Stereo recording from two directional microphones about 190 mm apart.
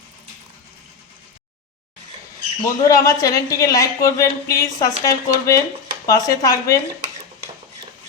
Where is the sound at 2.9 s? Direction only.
20° left (ahead or behind).